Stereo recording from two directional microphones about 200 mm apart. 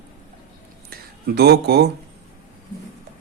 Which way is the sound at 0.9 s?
50° right (ahead or behind).